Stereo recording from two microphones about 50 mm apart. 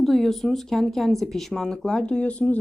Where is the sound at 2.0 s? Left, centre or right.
Left.